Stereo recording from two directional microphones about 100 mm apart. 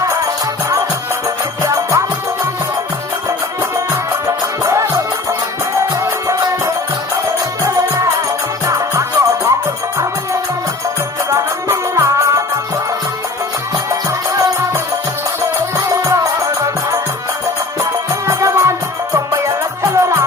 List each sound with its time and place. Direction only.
1.6 s music: 30° right (ahead or behind)
3.2 s music: 30° right (ahead or behind)
6.0 s music: 30° right (ahead or behind)
7.6 s music: 30° right (ahead or behind)
11.3 s music: 30° right (ahead or behind)
14.3 s music: 30° right (ahead or behind)
17.7 s music: 30° right (ahead or behind)
19.8 s music: 30° right (ahead or behind)